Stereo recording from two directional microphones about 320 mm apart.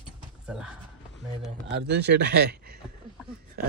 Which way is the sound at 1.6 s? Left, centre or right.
Right.